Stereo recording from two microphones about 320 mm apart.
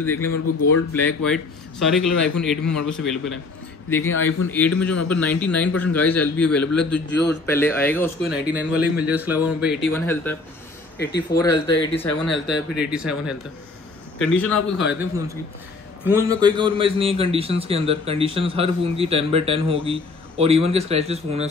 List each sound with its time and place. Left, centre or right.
0.0 s speech: centre
0.3 s speech: left
0.9 s a man's voice: centre
4.5 s a man's voice: centre
8.5 s a man's voice: centre
11.0 s speech: left
11.3 s speech: centre
12.3 s a man's voice: centre